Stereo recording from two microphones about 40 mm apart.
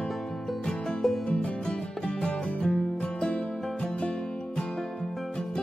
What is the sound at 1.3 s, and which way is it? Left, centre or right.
Music, left.